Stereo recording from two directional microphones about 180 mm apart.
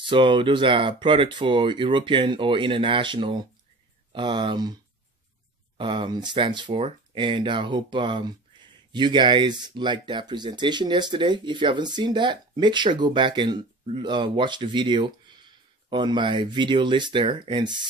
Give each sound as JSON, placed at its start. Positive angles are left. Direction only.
{"t": 0.1, "sound": "speech", "side_deg": -30}
{"t": 5.8, "sound": "speech", "side_deg": -30}